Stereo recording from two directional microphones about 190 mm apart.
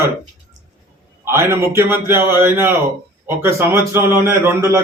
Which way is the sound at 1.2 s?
15° right (ahead or behind).